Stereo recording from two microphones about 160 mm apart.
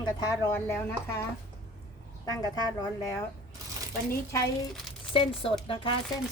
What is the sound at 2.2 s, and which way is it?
Speech, 25° left (ahead or behind).